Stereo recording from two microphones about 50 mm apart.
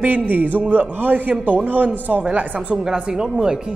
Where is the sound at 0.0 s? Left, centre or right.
Right.